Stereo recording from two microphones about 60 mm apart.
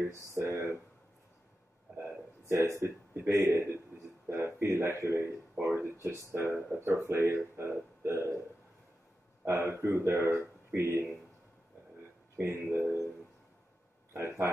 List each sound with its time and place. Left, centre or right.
0.3 s a sound: right
2.4 s speech: right
9.4 s speech: right
12.4 s speech: right
14.1 s speech: right